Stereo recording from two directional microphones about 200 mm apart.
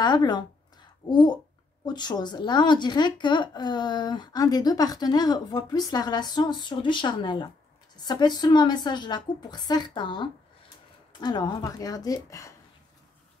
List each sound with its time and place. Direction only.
0.0 s speech: 20° left (ahead or behind)